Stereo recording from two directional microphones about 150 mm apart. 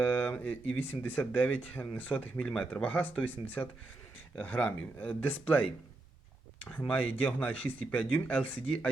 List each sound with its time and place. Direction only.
0.0 s speech: 10° left (ahead or behind)
6.7 s speech: 10° left (ahead or behind)